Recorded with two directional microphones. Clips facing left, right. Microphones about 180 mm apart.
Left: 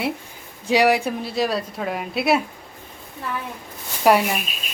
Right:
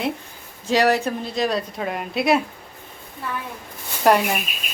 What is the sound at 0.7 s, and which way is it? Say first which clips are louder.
A woman's voice: left 1 dB; 10° left (ahead or behind).